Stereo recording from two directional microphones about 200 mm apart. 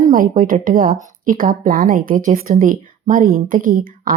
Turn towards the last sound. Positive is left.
turn(degrees=-45)  # may be behind; listen again after turning